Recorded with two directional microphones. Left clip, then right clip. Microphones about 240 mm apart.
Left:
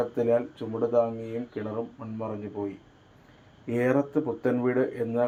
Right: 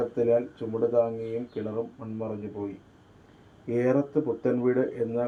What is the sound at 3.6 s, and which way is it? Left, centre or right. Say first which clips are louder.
Speech: even; centre.